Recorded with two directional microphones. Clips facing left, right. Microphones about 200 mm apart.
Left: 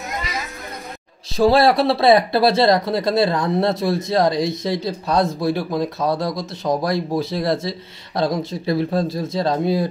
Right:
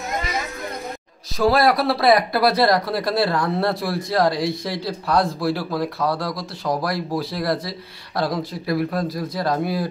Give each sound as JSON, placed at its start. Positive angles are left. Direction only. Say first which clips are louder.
{"t": 1.3, "sound": "speech", "louder": "left 3 dB", "side_deg": 30}